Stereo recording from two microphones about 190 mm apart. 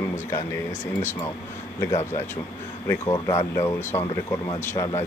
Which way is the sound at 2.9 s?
15° left (ahead or behind).